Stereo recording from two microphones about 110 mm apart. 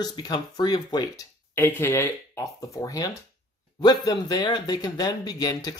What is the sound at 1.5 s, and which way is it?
Speech, 20° left (ahead or behind).